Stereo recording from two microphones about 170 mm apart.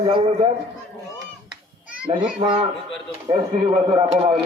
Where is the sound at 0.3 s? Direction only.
40° right (ahead or behind).